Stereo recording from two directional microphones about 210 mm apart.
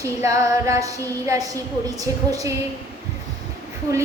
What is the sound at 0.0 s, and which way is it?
A woman's voice, 15° right (ahead or behind).